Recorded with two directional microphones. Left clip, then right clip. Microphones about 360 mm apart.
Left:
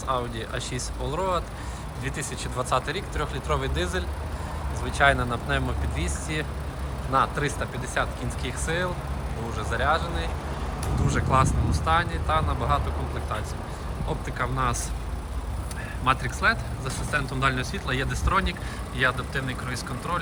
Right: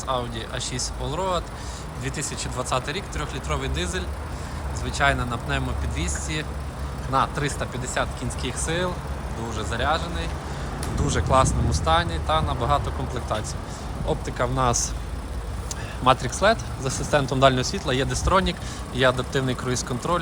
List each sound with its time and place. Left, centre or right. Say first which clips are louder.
0.1 s speech: right 1 dB; centre
14.1 s speech: right 4 dB; centre
16.0 s speech: right 4 dB; centre